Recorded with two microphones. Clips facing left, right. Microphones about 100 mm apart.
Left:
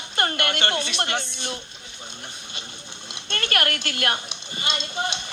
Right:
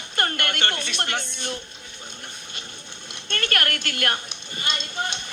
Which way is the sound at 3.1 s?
50° right (ahead or behind).